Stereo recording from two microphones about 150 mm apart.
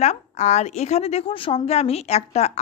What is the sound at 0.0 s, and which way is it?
A woman's voice, 50° left (ahead or behind).